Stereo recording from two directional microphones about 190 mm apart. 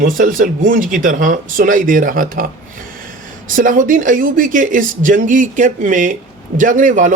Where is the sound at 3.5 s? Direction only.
45° right (ahead or behind).